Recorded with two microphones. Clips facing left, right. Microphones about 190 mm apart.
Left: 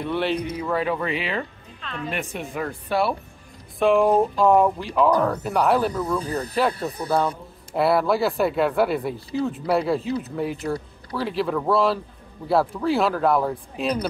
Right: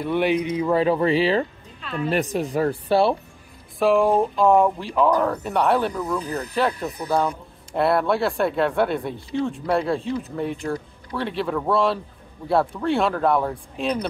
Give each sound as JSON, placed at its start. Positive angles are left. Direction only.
{"t": 0.1, "sound": "speech", "side_deg": -15}
{"t": 1.8, "sound": "music", "side_deg": -5}
{"t": 2.0, "sound": "speech", "side_deg": -40}
{"t": 3.8, "sound": "speech", "side_deg": 0}
{"t": 6.7, "sound": "speech", "side_deg": 35}
{"t": 7.7, "sound": "speech", "side_deg": 0}